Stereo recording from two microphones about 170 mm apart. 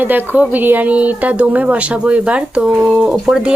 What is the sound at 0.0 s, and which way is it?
Speech, 10° right (ahead or behind).